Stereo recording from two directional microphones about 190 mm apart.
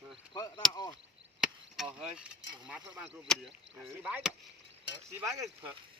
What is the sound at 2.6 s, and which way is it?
Speech, 5° right (ahead or behind).